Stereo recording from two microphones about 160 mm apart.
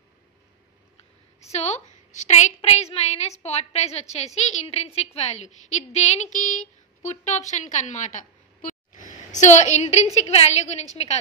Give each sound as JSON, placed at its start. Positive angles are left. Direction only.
{"t": 1.5, "sound": "a woman's voice", "side_deg": 45}